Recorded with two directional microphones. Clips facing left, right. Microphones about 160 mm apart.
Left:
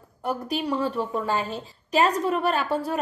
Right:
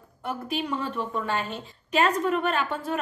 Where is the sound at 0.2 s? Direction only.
40° left (ahead or behind).